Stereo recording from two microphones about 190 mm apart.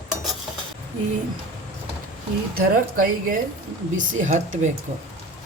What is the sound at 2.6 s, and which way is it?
Speech, 45° right (ahead or behind).